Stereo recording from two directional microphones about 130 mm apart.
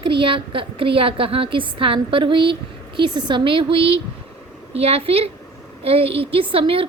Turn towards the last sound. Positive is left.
turn(degrees=-45)  # may be behind; listen again after turning